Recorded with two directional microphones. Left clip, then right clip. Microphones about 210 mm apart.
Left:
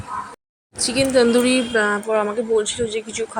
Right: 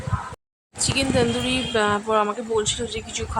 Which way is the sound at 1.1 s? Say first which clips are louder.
Left 6 dB; 15° left (ahead or behind).